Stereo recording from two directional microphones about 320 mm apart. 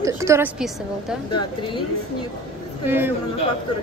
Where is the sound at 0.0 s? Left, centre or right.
Centre.